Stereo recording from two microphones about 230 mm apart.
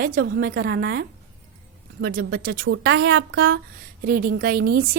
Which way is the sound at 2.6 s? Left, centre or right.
Right.